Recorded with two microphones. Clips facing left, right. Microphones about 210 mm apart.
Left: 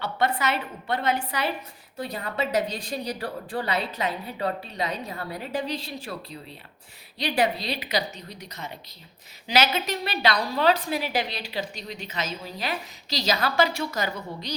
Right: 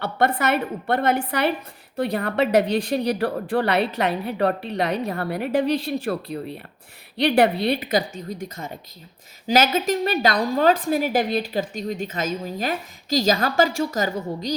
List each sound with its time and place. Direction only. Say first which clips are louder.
0.0 s a woman's voice: right 4 dB; 55° right (ahead or behind)